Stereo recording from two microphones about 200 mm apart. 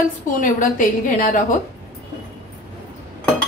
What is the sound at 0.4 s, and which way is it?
A woman's voice, 40° left (ahead or behind).